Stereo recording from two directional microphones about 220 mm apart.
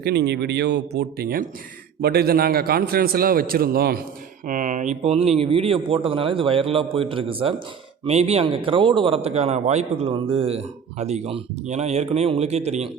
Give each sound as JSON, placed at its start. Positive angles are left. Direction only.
{"t": 0.0, "sound": "a man's voice", "side_deg": -50}